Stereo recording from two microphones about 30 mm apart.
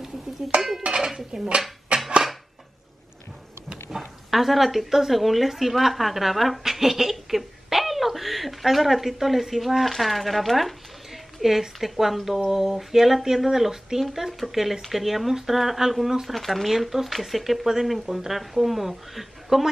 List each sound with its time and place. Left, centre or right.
0.6 s dishes: centre
0.8 s dishes: right
1.9 s a sound: right
3.9 s speech: centre
11.4 s speech: centre
16.3 s speech: centre